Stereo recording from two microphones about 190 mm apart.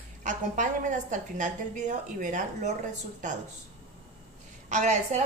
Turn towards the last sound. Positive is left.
turn(degrees=-40)  # may be behind; listen again after turning